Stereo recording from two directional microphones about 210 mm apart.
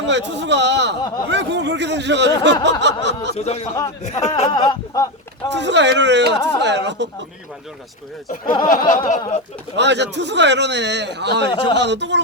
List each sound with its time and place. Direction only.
0.1 s speech: 55° right (ahead or behind)
3.3 s a sound: 30° left (ahead or behind)
4.4 s speech: 20° left (ahead or behind)
5.5 s speech: 55° right (ahead or behind)
8.6 s a sound: 40° left (ahead or behind)
9.7 s speech: 55° right (ahead or behind)